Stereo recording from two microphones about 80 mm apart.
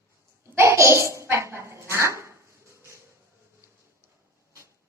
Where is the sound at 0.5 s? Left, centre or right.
Right.